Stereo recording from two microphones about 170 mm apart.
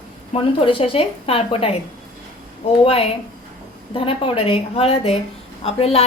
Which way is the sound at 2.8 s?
35° left (ahead or behind).